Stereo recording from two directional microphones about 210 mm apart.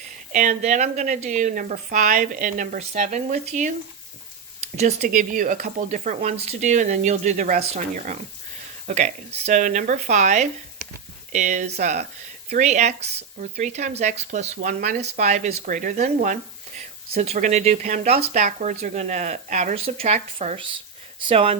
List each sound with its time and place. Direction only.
0.3 s speech: 35° right (ahead or behind)
4.8 s speech: 30° right (ahead or behind)